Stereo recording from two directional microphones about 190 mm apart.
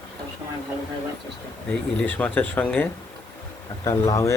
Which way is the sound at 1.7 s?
5° left (ahead or behind).